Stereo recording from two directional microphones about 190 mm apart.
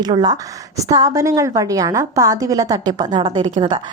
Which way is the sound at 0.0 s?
20° right (ahead or behind).